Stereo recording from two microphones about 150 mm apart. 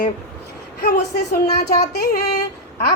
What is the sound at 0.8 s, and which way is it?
Speech, 90° left.